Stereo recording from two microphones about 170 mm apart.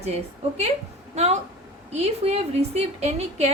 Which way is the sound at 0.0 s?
40° right (ahead or behind).